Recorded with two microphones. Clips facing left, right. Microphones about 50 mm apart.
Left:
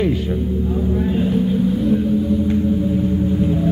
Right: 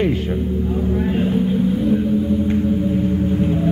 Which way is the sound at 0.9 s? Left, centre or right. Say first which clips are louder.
Even; right.